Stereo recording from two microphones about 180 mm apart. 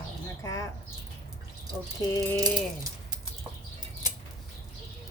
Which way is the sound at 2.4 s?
20° right (ahead or behind).